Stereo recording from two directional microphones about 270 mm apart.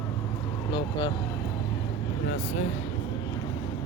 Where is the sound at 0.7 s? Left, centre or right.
Centre.